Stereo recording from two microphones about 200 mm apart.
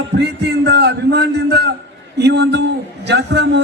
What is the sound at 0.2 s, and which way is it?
A man's voice, 55° right (ahead or behind).